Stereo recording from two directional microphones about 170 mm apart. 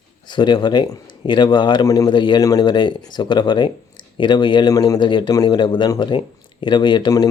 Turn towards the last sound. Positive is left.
turn(degrees=25)  # may be behind; listen again after turning